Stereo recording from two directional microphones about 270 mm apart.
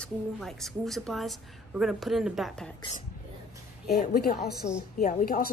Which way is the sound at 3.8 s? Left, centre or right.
Left.